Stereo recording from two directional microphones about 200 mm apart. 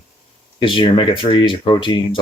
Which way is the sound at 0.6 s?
25° left (ahead or behind).